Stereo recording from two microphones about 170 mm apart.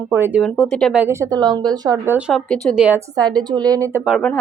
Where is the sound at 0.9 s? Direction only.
10° right (ahead or behind).